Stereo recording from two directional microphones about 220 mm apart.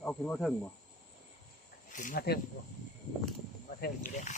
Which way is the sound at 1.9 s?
40° left (ahead or behind).